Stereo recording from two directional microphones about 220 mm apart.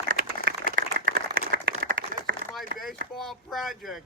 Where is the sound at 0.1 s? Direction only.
40° right (ahead or behind).